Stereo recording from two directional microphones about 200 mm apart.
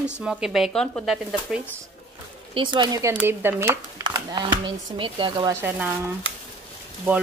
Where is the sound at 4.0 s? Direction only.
20° right (ahead or behind).